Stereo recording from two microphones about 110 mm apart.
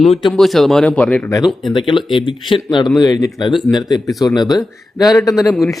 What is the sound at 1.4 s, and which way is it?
Speech, centre (ahead or behind).